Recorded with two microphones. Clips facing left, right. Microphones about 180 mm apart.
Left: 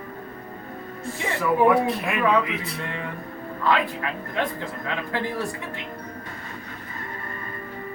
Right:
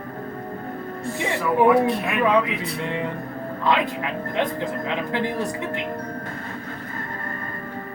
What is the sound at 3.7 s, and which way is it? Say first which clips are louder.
A man's voice: right 1 dB; 20° right (ahead or behind).